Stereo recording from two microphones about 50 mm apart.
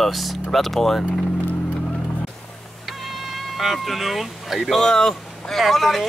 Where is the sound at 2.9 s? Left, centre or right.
Centre.